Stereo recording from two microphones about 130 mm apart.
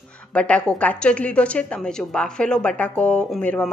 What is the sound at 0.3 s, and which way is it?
A woman's voice, 10° left (ahead or behind).